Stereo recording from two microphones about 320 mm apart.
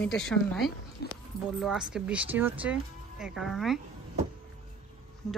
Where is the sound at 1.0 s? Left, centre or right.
Left.